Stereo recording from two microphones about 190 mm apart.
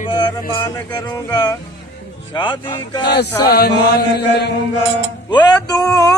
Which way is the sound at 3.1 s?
60° left (ahead or behind).